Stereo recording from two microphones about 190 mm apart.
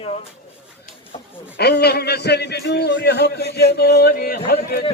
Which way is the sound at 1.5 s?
60° left (ahead or behind).